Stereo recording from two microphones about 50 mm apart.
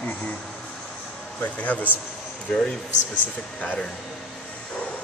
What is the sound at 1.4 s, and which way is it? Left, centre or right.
Speech, left.